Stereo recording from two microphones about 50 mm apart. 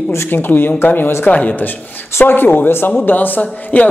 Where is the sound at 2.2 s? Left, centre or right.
Left.